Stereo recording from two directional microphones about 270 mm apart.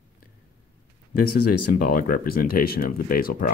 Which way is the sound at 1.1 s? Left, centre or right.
Left.